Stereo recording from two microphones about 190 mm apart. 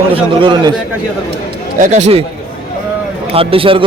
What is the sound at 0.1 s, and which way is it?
Speech, 25° right (ahead or behind).